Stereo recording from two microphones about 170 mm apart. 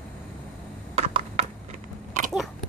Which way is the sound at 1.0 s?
35° right (ahead or behind).